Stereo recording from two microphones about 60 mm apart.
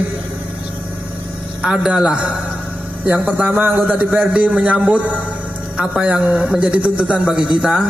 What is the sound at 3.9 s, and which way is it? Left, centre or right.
A man's voice, right.